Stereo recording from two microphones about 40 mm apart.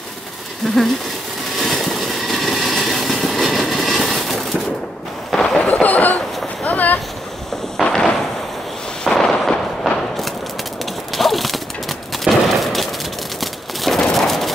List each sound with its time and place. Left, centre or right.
1.6 s vehicle: centre
5.3 s a sound: centre
5.6 s train: left
7.7 s fireworks: centre
9.0 s artillery fire: centre
11.1 s a sound: centre
13.4 s fusillade: centre